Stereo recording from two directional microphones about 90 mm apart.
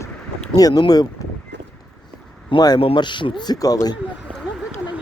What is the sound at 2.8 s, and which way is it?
Speech, 65° left (ahead or behind).